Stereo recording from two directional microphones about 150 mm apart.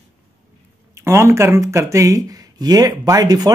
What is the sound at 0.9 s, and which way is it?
Speech, 20° right (ahead or behind).